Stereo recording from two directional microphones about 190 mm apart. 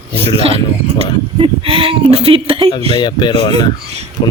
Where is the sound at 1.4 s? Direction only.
30° right (ahead or behind).